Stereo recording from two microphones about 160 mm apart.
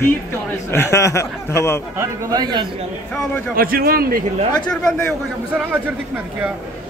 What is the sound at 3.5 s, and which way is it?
Speech, 65° right (ahead or behind).